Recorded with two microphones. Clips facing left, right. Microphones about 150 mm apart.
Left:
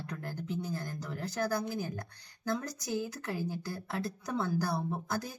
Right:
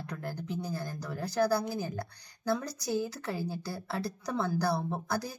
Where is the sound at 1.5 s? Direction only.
40° right (ahead or behind).